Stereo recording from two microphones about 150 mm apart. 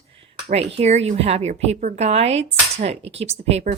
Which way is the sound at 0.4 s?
40° right (ahead or behind).